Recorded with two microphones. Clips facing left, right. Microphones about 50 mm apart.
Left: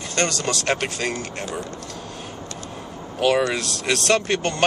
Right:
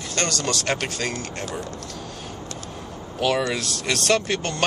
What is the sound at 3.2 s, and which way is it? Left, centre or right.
A man's voice, centre.